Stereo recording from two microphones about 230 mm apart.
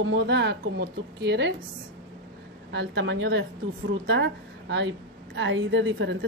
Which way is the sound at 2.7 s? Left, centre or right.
Right.